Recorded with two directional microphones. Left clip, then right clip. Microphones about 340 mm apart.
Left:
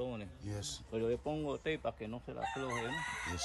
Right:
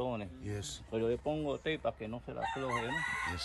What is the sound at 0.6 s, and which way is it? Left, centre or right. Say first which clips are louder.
Speech: even; left.